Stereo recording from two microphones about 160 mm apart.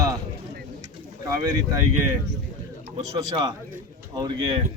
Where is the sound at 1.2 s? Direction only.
25° right (ahead or behind).